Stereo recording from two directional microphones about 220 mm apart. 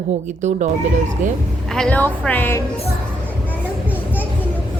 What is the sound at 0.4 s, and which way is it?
Speech, 35° right (ahead or behind).